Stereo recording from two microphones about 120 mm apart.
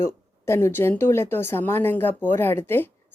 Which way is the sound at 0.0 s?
20° left (ahead or behind).